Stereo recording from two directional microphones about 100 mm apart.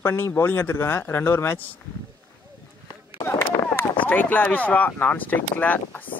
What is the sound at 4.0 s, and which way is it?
Speech, 15° left (ahead or behind).